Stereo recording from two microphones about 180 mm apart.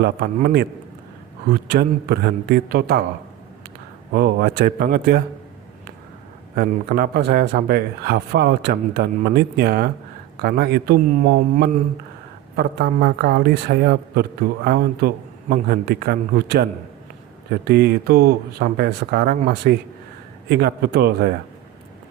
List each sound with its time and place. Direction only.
0.0 s a man's voice: 60° right (ahead or behind)
4.1 s a man's voice: 60° right (ahead or behind)
6.6 s a man's voice: 55° right (ahead or behind)